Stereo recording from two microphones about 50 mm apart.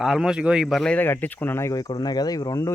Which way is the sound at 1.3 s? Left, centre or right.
Left.